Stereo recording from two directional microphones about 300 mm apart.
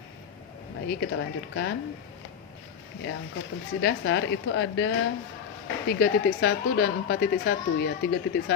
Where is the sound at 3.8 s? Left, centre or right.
Left.